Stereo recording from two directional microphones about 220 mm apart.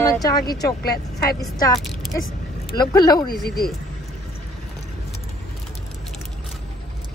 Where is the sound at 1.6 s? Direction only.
15° left (ahead or behind).